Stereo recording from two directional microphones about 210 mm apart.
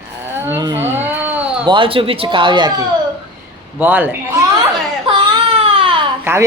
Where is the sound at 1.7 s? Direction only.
25° right (ahead or behind).